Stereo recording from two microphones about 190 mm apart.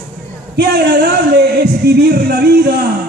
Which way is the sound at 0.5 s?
60° right (ahead or behind).